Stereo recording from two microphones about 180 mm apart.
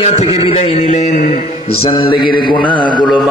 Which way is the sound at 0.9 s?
45° left (ahead or behind).